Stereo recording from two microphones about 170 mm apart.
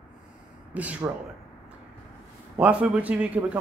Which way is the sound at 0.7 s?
10° right (ahead or behind).